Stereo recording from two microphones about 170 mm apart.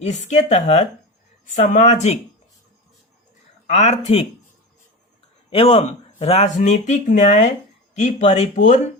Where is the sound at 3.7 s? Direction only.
40° left (ahead or behind).